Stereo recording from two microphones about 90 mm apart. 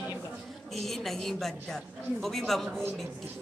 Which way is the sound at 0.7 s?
Centre (ahead or behind).